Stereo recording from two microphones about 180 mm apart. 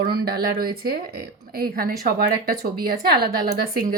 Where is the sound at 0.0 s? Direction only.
60° right (ahead or behind).